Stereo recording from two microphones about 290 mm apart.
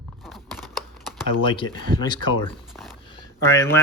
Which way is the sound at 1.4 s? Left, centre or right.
Centre.